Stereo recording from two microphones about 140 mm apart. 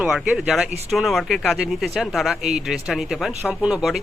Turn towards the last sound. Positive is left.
turn(degrees=-5)  # may be behind; listen again after turning